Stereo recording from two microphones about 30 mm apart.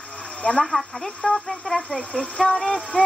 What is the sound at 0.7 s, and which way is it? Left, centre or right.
Speech, centre.